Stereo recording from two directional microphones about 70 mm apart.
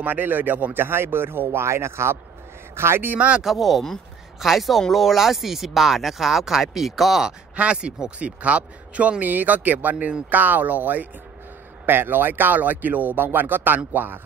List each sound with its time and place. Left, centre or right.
0.0 s speech: right
3.2 s speech: centre
3.4 s speech: centre; by 14.2 s right